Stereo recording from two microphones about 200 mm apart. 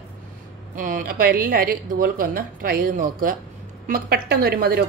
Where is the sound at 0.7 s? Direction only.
45° right (ahead or behind).